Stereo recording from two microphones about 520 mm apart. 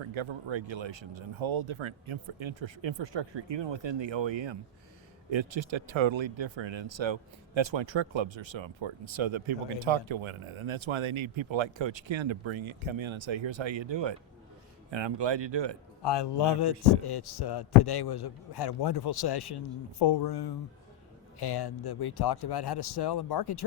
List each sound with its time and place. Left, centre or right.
0.0 s speech: right
16.0 s a man's voice: left